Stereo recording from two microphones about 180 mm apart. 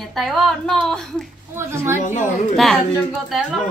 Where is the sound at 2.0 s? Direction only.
45° left (ahead or behind).